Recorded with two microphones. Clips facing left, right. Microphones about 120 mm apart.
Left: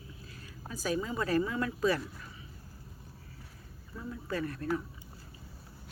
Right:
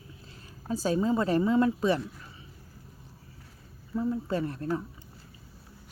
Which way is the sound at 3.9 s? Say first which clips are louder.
Right 8 dB; 30° right (ahead or behind).